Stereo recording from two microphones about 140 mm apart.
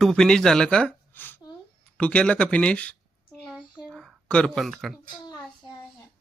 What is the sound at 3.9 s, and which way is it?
A woman's voice, centre (ahead or behind).